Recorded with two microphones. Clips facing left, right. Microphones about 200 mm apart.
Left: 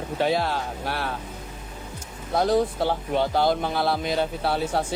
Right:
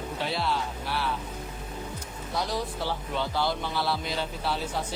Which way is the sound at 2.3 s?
55° left (ahead or behind).